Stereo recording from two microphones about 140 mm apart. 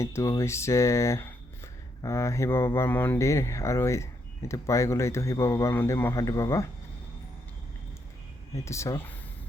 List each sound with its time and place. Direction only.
0.0 s speech: 20° left (ahead or behind)
8.5 s speech: 20° left (ahead or behind)